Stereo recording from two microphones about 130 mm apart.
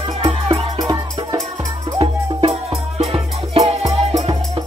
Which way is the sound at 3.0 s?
50° right (ahead or behind).